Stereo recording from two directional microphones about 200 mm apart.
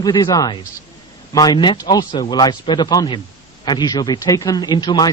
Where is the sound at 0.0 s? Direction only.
20° left (ahead or behind).